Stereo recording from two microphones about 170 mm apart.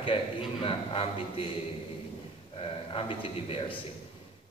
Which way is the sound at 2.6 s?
30° left (ahead or behind).